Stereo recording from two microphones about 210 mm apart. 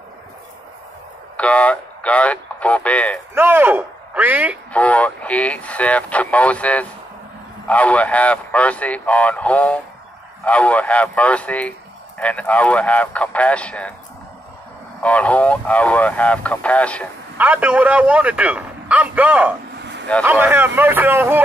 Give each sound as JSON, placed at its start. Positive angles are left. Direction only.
{"t": 1.3, "sound": "speech", "side_deg": 5}
{"t": 3.3, "sound": "speech", "side_deg": -10}
{"t": 4.7, "sound": "a man's voice", "side_deg": 5}
{"t": 15.0, "sound": "a man's voice", "side_deg": 5}
{"t": 17.4, "sound": "a man's voice", "side_deg": -10}
{"t": 19.8, "sound": "a sound", "side_deg": -55}
{"t": 20.2, "sound": "a man's voice", "side_deg": -10}